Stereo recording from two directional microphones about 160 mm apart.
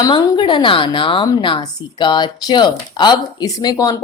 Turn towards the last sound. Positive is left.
turn(degrees=25)  # may be behind; listen again after turning